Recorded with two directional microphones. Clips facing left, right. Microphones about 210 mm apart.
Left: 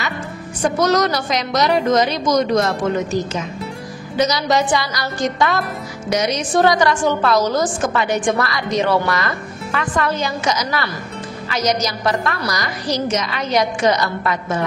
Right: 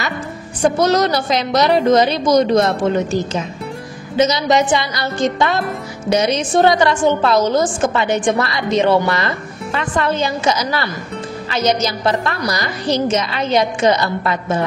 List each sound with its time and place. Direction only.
0.6 s a woman's voice: 30° right (ahead or behind)
4.2 s a woman's voice: 20° right (ahead or behind)